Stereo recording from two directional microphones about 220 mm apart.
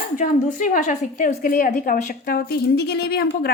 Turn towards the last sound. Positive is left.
turn(degrees=45)  # may be behind; listen again after turning